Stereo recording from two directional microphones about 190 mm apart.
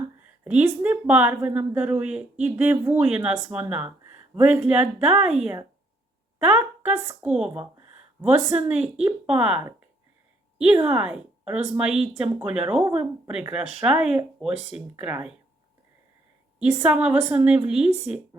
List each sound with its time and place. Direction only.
0.2 s speech: 10° right (ahead or behind)
6.6 s speech: 15° right (ahead or behind)
10.6 s a woman's voice: 5° right (ahead or behind)
16.6 s speech: 10° right (ahead or behind)